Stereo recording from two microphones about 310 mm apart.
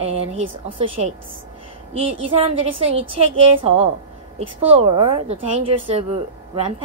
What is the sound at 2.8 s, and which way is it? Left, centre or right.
Speech, centre.